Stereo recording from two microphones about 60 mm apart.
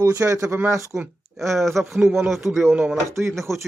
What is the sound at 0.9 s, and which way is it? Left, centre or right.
Speech, right.